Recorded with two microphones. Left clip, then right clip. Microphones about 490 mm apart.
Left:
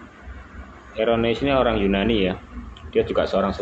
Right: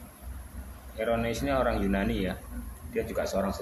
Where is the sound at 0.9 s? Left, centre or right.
Right.